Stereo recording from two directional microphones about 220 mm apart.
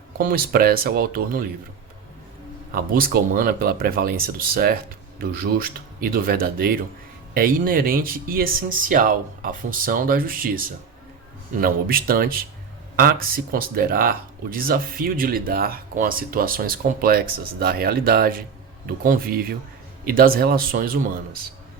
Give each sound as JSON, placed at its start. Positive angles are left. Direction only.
{"t": 0.3, "sound": "speech", "side_deg": -45}
{"t": 2.7, "sound": "speech", "side_deg": -40}